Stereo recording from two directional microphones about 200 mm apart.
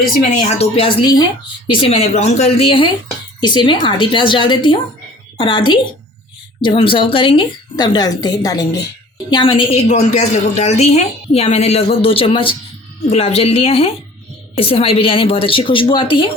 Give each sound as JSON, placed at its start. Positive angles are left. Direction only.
{"t": 0.6, "sound": "a woman's voice", "side_deg": 25}